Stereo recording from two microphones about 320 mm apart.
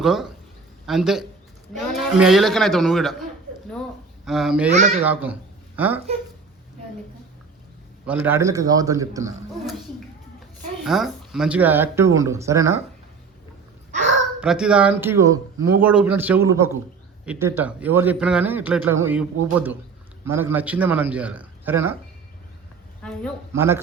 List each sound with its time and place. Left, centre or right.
0.0 s a man's voice: centre
4.3 s a man's voice: centre
4.7 s speech: right
5.0 s speech: centre
8.0 s speech: centre
10.8 s speech: centre
14.4 s a man's voice: centre
23.0 s a man's voice: centre
23.5 s speech: centre